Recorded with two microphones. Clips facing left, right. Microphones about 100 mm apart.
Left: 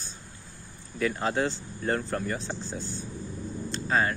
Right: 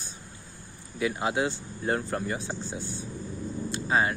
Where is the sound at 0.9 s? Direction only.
10° right (ahead or behind).